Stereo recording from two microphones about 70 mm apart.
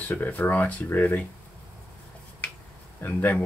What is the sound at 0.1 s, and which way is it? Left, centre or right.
Speech, left.